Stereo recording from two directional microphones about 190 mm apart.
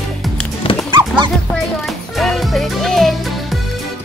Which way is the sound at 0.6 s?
30° left (ahead or behind).